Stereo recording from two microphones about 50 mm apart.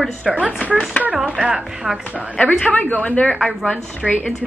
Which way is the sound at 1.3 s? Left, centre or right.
Centre.